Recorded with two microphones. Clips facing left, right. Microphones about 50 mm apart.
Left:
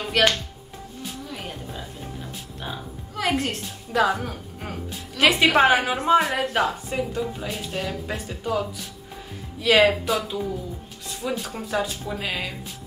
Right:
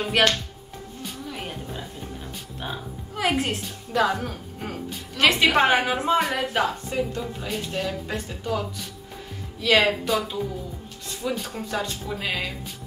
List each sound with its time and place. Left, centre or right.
0.2 s speech: centre
1.0 s music: centre
3.9 s a woman's voice: centre